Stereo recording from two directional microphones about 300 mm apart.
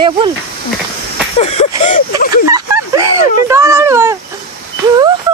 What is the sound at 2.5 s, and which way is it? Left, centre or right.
Speech, centre.